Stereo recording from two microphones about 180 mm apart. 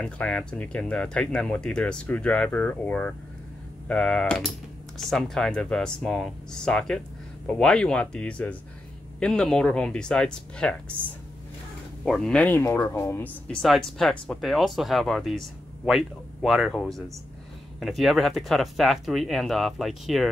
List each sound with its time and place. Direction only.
0.0 s speech: 5° left (ahead or behind)
12.0 s speech: 5° left (ahead or behind)